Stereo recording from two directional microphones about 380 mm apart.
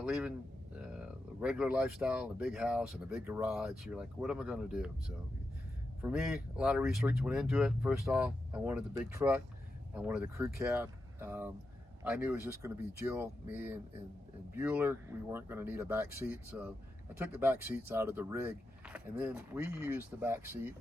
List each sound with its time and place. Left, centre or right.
0.0 s speech: centre
6.0 s speech: centre